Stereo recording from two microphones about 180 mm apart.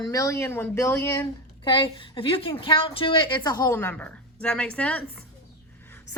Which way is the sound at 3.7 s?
10° left (ahead or behind).